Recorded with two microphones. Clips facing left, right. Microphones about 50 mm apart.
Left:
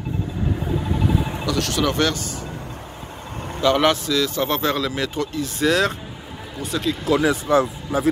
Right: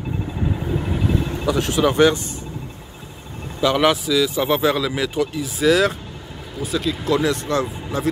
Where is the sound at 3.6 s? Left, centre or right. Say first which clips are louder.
Even; centre.